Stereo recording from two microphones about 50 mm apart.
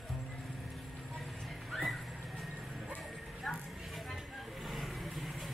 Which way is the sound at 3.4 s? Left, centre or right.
Centre.